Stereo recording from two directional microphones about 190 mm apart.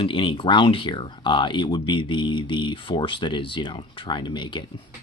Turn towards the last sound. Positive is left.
turn(degrees=25)  # may be behind; listen again after turning